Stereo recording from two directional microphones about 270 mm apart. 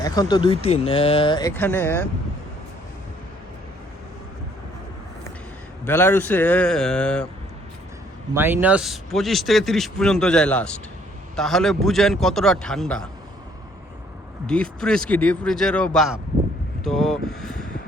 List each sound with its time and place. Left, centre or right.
0.0 s speech: centre
5.8 s speech: centre
8.3 s speech: centre
14.4 s speech: centre